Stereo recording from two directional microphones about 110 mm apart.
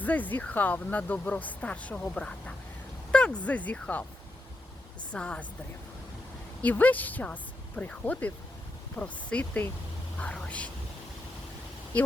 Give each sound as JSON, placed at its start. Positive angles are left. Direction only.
{"t": 0.0, "sound": "speech", "side_deg": 15}
{"t": 5.1, "sound": "speech", "side_deg": 10}
{"t": 6.6, "sound": "speech", "side_deg": 15}
{"t": 11.9, "sound": "speech", "side_deg": 15}